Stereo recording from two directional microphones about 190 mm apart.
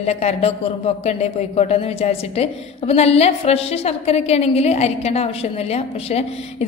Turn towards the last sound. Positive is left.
turn(degrees=35)  # may be behind; listen again after turning